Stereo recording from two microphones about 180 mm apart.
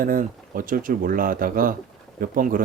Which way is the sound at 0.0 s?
50° right (ahead or behind).